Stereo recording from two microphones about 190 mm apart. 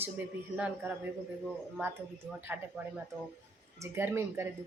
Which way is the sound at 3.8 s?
15° right (ahead or behind).